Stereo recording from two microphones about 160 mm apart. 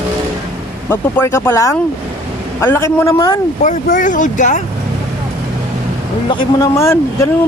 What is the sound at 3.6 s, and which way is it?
Speech, 55° left (ahead or behind).